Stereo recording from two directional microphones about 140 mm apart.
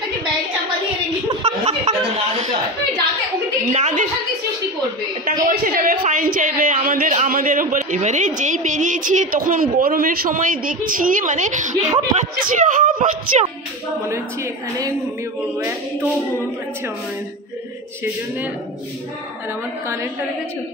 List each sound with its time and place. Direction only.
1.4 s chuckle: 50° right (ahead or behind)
3.7 s a sound: 60° right (ahead or behind)
5.2 s a sound: 90° right; by 10.8 s 75° right (ahead or behind)
10.9 s a woman's voice: 70° right (ahead or behind)
11.8 s speech: 50° right (ahead or behind)
12.4 s speech: 70° right (ahead or behind)